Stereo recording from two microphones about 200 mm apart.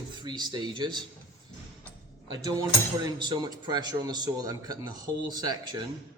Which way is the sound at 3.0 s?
20° right (ahead or behind).